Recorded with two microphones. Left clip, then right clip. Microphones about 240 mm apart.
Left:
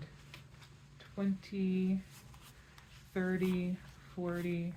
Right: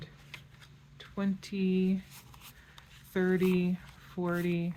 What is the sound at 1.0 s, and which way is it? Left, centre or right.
Speech, right.